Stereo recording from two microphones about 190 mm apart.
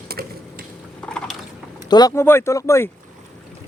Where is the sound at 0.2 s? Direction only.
55° right (ahead or behind).